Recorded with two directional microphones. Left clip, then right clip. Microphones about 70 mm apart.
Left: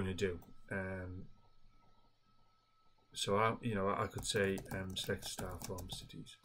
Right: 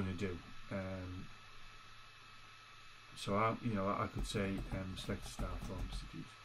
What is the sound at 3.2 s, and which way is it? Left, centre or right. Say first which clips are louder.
Speech: left 2 dB; left.